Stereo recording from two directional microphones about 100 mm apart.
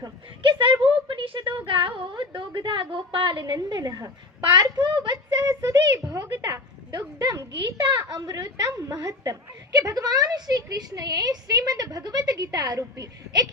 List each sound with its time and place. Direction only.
0.4 s a woman's voice: 55° right (ahead or behind); by 13.5 s 40° right (ahead or behind)